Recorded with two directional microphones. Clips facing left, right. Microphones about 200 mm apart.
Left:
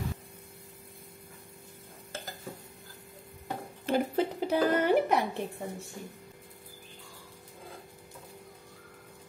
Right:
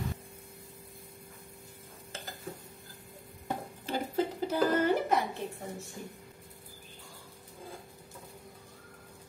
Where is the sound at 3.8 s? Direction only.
60° left (ahead or behind).